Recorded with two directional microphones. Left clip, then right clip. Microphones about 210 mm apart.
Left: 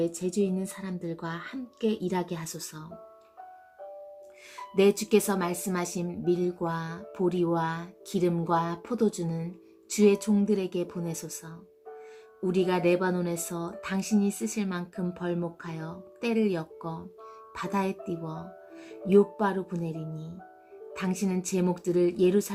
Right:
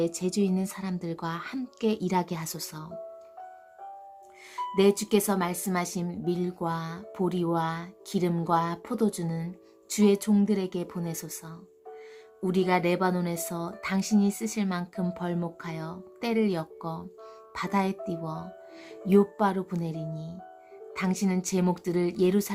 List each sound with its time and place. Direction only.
0.0 s speech: 25° right (ahead or behind)
4.5 s speech: 20° right (ahead or behind)